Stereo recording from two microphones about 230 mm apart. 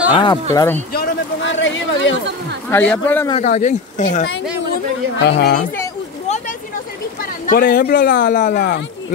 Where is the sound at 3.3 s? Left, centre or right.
Left.